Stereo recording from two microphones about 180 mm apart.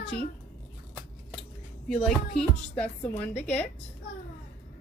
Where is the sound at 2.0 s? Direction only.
5° left (ahead or behind).